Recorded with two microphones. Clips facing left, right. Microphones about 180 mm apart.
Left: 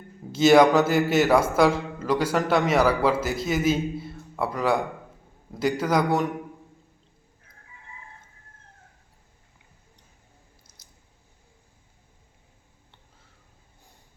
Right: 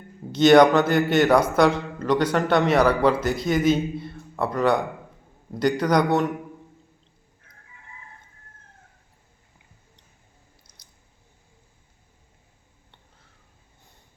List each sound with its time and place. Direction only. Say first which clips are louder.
0.3 s a man's voice: right 2 dB; 5° left (ahead or behind)
10.7 s chewing: even; 5° left (ahead or behind)